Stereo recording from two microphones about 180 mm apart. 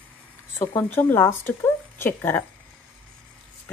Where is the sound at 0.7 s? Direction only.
10° left (ahead or behind).